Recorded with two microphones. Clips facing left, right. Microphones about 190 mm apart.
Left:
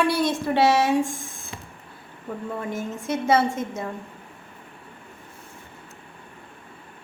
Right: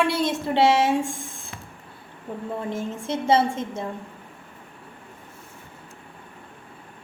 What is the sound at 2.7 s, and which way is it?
A woman's voice, 25° right (ahead or behind).